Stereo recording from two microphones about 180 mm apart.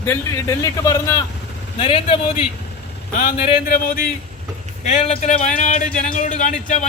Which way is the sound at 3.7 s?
55° left (ahead or behind).